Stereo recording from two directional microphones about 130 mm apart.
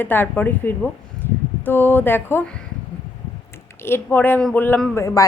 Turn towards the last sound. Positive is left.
turn(degrees=25)  # may be behind; listen again after turning